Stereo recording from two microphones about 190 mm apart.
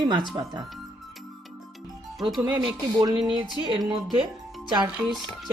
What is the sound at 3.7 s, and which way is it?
Speech, 25° right (ahead or behind).